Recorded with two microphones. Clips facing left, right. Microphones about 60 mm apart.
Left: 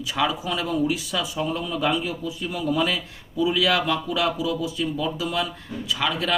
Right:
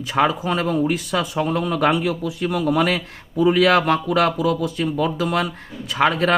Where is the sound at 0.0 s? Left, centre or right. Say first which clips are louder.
Right 5 dB; right.